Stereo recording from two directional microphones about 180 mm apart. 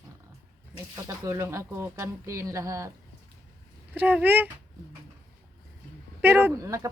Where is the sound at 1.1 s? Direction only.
15° right (ahead or behind).